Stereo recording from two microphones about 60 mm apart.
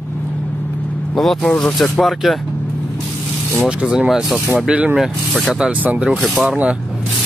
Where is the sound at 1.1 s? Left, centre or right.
Centre.